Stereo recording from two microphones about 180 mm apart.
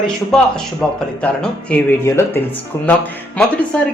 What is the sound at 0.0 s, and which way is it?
Speech, 5° left (ahead or behind).